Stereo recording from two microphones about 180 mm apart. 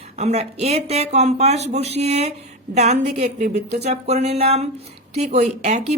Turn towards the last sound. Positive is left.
turn(degrees=-40)  # may be behind; listen again after turning